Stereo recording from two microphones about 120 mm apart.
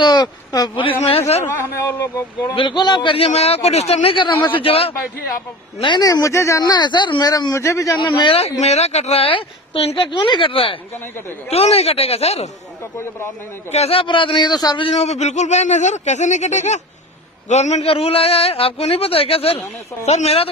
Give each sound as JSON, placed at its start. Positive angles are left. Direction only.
{"t": 0.0, "sound": "speech", "side_deg": 35}
{"t": 0.7, "sound": "a man's voice", "side_deg": 50}
{"t": 1.8, "sound": "speech", "side_deg": 25}
{"t": 2.5, "sound": "speech", "side_deg": 40}
{"t": 3.3, "sound": "a man's voice", "side_deg": 60}
{"t": 5.8, "sound": "speech", "side_deg": 40}
{"t": 6.0, "sound": "speech", "side_deg": 25}
{"t": 6.6, "sound": "speech", "side_deg": 35}
{"t": 8.1, "sound": "speech", "side_deg": 45}
{"t": 11.5, "sound": "a man's voice", "side_deg": 60}
{"t": 13.7, "sound": "speech", "side_deg": 60}
{"t": 15.0, "sound": "a man's voice", "side_deg": 70}